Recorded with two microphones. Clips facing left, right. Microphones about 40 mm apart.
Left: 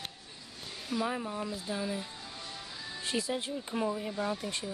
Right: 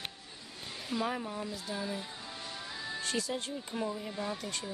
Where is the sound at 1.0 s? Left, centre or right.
Centre.